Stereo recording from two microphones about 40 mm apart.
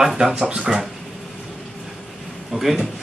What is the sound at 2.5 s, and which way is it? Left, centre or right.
Speech, centre.